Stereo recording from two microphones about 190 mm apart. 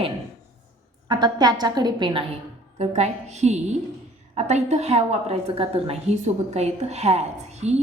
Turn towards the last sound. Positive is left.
turn(degrees=-35)  # may be behind; listen again after turning